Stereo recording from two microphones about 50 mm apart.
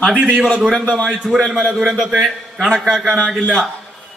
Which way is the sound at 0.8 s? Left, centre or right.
Left.